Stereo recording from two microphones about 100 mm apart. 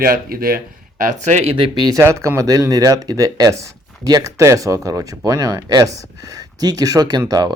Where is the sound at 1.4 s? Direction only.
70° right (ahead or behind).